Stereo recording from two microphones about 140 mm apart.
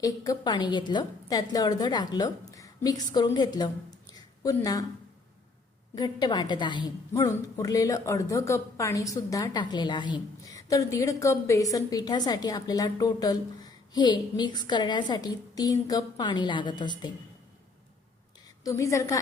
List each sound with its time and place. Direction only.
0.0 s a woman's voice: 30° left (ahead or behind)
4.1 s a sound: 25° left (ahead or behind)
5.9 s a woman's voice: 30° left (ahead or behind)
18.6 s a woman's voice: 25° left (ahead or behind)